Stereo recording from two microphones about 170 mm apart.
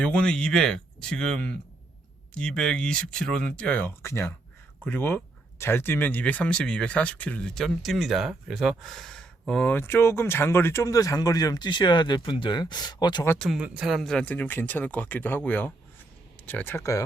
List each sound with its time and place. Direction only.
0.0 s speech: 5° left (ahead or behind); by 13.2 s 25° left (ahead or behind)
13.4 s speech: 5° right (ahead or behind); by 17.0 s 15° left (ahead or behind)